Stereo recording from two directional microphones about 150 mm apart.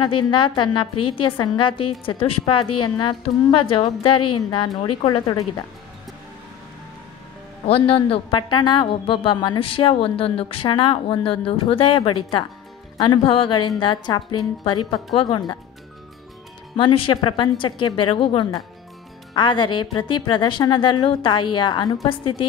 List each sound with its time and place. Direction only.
0.0 s a woman's voice: 35° left (ahead or behind)
7.6 s a woman's voice: 40° left (ahead or behind)
16.7 s a woman's voice: 35° left (ahead or behind)